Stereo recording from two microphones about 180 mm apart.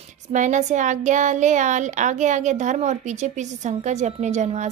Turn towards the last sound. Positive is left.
turn(degrees=-40)  # may be behind; listen again after turning